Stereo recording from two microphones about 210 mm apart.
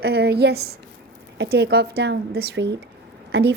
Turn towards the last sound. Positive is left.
turn(degrees=-55)  # may be behind; listen again after turning